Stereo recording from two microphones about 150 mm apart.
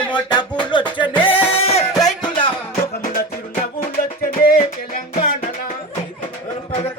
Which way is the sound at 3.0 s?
70° left (ahead or behind).